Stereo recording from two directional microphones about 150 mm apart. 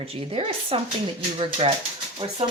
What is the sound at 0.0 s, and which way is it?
Speech, 40° right (ahead or behind).